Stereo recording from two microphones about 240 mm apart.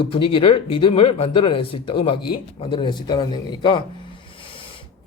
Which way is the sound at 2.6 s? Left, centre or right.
Centre.